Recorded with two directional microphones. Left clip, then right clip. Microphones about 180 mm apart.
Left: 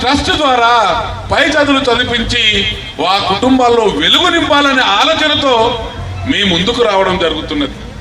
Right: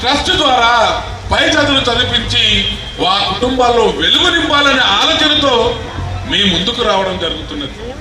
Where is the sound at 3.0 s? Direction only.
20° left (ahead or behind).